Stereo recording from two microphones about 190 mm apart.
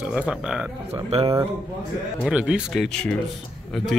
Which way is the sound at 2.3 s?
5° right (ahead or behind).